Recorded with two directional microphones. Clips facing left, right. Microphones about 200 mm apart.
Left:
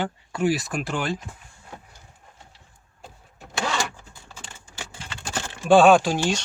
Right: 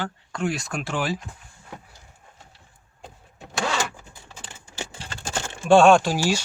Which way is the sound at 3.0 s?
Centre (ahead or behind).